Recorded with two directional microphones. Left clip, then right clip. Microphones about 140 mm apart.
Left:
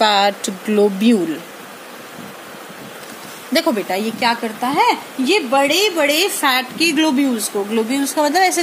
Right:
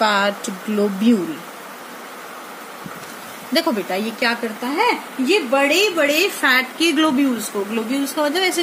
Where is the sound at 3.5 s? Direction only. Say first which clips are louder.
Left 2 dB; 50° left (ahead or behind).